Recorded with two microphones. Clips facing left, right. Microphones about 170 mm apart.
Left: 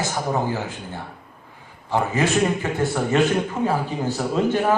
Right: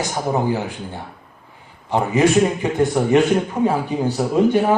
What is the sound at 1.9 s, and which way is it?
A man's voice, 15° right (ahead or behind).